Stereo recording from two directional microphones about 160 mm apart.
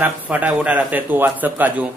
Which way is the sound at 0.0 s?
10° right (ahead or behind).